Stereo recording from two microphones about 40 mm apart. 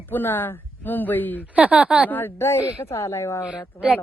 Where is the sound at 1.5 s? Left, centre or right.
Right.